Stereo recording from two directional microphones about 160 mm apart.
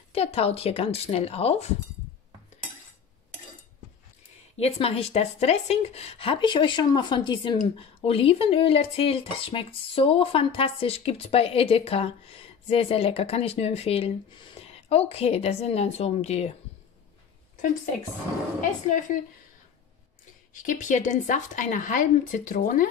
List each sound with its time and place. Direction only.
0.1 s speech: 40° left (ahead or behind)
4.6 s speech: 40° left (ahead or behind)
18.6 s a woman's voice: 55° left (ahead or behind)
20.5 s speech: 55° left (ahead or behind)